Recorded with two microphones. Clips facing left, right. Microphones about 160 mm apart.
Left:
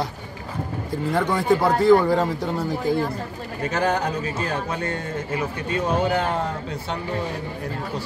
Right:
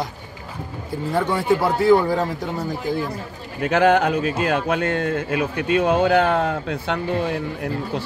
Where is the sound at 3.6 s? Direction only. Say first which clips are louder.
Right 6 dB; 65° right (ahead or behind).